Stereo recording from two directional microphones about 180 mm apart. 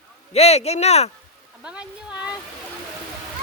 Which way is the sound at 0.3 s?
35° left (ahead or behind).